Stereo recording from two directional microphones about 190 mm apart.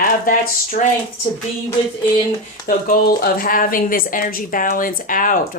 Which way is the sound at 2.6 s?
50° left (ahead or behind).